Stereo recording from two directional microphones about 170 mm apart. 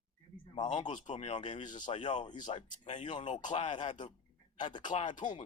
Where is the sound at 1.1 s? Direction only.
40° left (ahead or behind).